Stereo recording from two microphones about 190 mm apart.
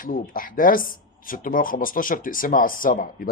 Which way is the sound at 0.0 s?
50° left (ahead or behind).